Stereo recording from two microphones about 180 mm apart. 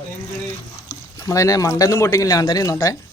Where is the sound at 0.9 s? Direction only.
20° left (ahead or behind).